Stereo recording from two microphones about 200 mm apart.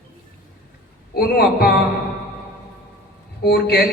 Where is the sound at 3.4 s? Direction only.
55° left (ahead or behind).